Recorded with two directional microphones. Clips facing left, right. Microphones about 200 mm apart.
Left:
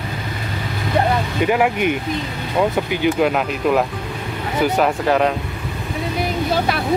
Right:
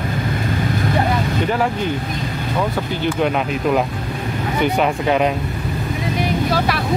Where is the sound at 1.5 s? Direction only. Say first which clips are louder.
Left 2 dB; 15° left (ahead or behind).